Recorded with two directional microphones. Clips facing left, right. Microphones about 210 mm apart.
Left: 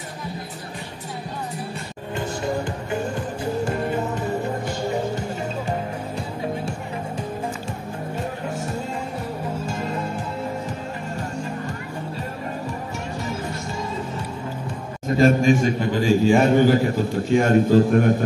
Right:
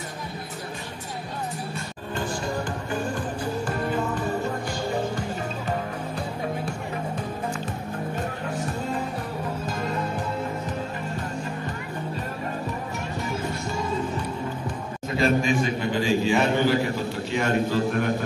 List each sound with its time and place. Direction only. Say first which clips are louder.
2.9 s music: left 2 dB; 25° left (ahead or behind)
15.1 s a sound: left 5 dB; 45° left (ahead or behind)
17.3 s a man's voice: left 8 dB; 45° left (ahead or behind)